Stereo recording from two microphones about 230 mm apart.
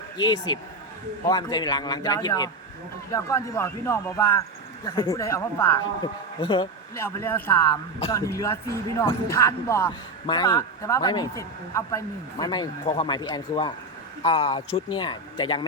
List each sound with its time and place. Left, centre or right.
0.2 s a man's voice: centre
6.4 s speech: left
7.0 s a man's voice: centre